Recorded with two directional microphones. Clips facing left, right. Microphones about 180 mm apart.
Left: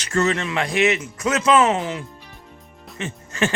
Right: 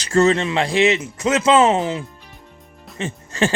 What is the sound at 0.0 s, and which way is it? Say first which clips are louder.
Speech: right 5 dB; 30° right (ahead or behind).